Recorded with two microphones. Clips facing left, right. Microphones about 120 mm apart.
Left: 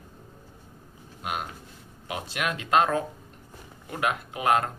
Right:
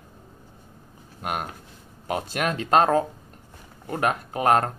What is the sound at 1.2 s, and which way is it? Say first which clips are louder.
Speech: right 3 dB; 50° right (ahead or behind).